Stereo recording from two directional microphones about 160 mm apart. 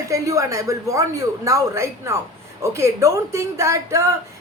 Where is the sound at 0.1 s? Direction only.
20° right (ahead or behind).